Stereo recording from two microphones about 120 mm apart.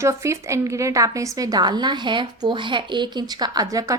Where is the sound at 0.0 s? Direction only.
25° right (ahead or behind).